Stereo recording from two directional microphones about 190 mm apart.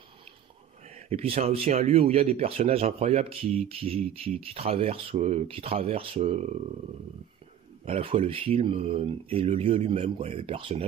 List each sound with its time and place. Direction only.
0.8 s speech: 35° right (ahead or behind)
7.8 s speech: 30° right (ahead or behind)